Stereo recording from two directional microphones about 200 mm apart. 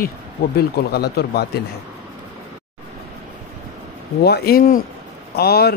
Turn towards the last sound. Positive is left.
turn(degrees=50)  # may be behind; listen again after turning